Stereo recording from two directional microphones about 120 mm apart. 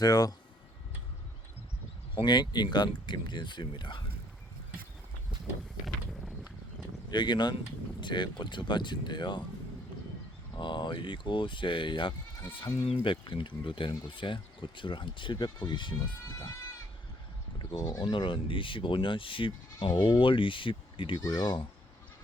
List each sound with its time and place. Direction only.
0.0 s speech: 35° left (ahead or behind)
2.1 s speech: 40° left (ahead or behind)
7.1 s speech: 40° left (ahead or behind)
10.5 s speech: 40° left (ahead or behind)
17.6 s speech: 35° left (ahead or behind)
18.0 s speech: 40° left (ahead or behind)
21.2 s speech: 35° left (ahead or behind)